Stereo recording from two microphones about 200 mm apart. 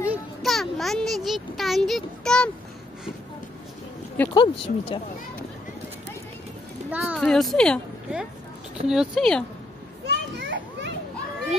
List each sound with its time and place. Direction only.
0.1 s a child's voice: centre (ahead or behind)
4.3 s speech: 25° left (ahead or behind)
6.9 s speech: 5° right (ahead or behind)
10.0 s children playing: 60° right (ahead or behind)